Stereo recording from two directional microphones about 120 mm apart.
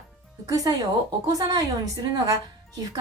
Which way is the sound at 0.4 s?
30° right (ahead or behind).